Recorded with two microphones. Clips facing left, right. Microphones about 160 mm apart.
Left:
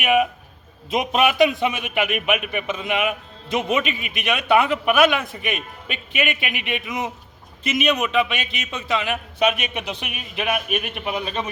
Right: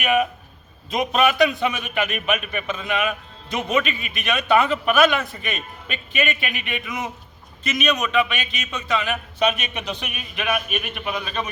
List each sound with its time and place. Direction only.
0.0 s a man's voice: 15° left (ahead or behind)